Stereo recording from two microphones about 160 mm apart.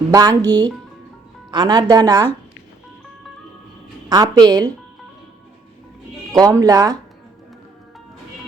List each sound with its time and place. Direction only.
0.1 s a woman's voice: 25° right (ahead or behind)
4.1 s a woman's voice: 25° right (ahead or behind)
6.3 s a woman's voice: 20° right (ahead or behind)